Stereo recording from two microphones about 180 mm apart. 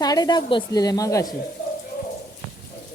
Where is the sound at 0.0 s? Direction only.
20° left (ahead or behind).